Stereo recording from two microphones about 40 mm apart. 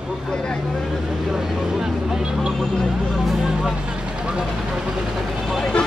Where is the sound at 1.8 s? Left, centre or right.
Centre.